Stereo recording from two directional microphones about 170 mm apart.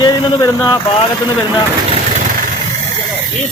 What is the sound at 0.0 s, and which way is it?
Speech, 25° left (ahead or behind).